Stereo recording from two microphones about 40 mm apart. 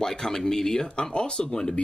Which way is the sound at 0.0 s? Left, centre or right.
Centre.